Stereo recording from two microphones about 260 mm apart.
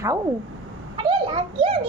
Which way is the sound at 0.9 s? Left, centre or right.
Centre.